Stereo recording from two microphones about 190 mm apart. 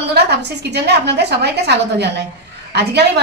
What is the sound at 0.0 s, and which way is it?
A woman's voice, 60° right (ahead or behind).